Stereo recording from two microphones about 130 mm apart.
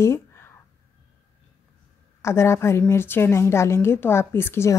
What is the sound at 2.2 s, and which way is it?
A woman's voice, 20° left (ahead or behind).